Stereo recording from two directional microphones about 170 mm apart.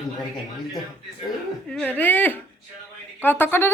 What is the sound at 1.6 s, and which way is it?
A woman's voice, 5° left (ahead or behind).